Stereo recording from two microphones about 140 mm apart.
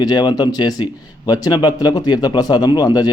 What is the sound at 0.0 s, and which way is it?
A man's voice, 30° left (ahead or behind).